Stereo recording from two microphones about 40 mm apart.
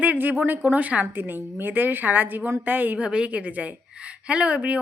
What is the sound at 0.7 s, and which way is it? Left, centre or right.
Speech, right.